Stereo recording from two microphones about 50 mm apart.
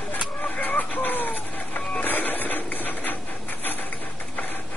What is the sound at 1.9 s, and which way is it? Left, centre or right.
Printer, left.